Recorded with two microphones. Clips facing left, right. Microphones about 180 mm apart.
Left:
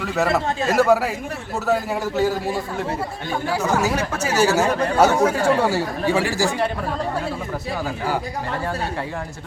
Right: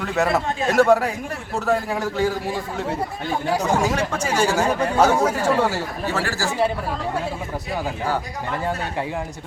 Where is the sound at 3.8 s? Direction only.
5° left (ahead or behind).